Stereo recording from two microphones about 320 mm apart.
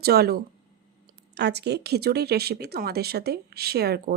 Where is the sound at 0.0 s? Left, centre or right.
Right.